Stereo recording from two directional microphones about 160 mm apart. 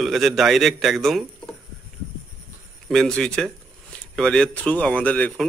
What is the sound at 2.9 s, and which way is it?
A man's voice, 5° left (ahead or behind).